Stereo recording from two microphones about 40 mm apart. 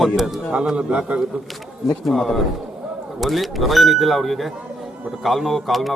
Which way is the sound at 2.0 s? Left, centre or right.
Centre.